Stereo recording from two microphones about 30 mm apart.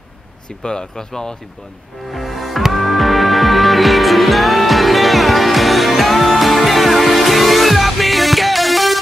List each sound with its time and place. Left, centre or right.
0.7 s speech: left
2.0 s music: centre